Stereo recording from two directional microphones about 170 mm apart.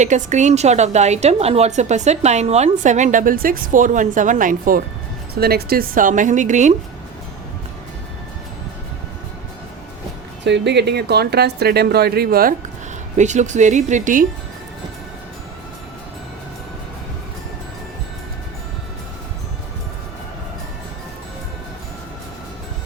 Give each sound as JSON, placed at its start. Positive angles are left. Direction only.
{"t": 0.0, "sound": "a woman's voice", "side_deg": -45}
{"t": 5.3, "sound": "a woman's voice", "side_deg": -65}
{"t": 10.4, "sound": "speech", "side_deg": -90}
{"t": 13.1, "sound": "a woman's voice", "side_deg": -45}